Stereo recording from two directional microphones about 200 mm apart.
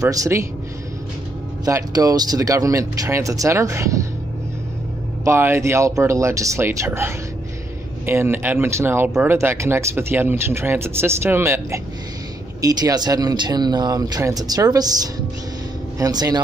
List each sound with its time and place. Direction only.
0.0 s speech: 15° right (ahead or behind)
1.6 s speech: 15° right (ahead or behind)
5.2 s speech: 15° right (ahead or behind)